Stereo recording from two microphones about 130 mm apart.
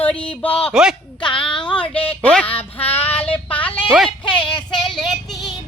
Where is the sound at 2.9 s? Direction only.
50° left (ahead or behind).